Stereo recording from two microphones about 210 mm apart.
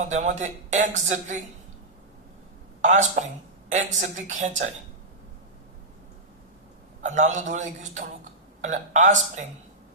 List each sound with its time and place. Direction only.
0.1 s a man's voice: 35° right (ahead or behind)
2.8 s a man's voice: 35° right (ahead or behind)
7.0 s a man's voice: 35° right (ahead or behind)